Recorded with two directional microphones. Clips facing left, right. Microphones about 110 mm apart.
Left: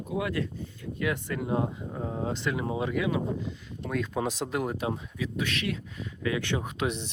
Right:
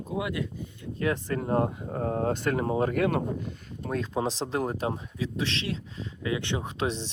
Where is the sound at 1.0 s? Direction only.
35° right (ahead or behind); by 3.9 s 50° right (ahead or behind).